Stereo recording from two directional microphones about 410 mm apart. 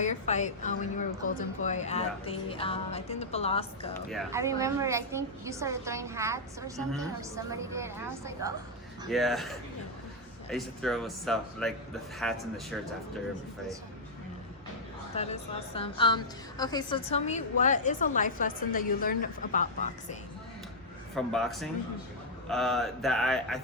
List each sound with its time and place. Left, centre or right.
0.0 s a woman's voice: centre
4.1 s a woman's voice: centre
10.5 s speech: centre
15.1 s a woman's voice: centre
21.3 s speech: centre